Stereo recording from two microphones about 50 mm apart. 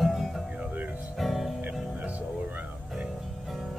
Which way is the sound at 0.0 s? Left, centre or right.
Centre.